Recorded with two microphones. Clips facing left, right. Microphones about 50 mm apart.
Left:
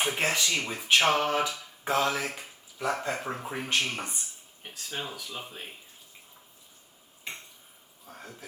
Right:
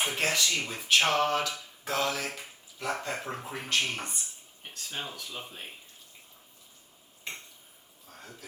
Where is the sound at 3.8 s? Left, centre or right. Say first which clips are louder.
Left 1 dB; left.